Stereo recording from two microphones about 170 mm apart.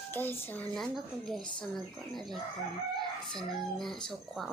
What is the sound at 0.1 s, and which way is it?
A woman's voice, 10° left (ahead or behind).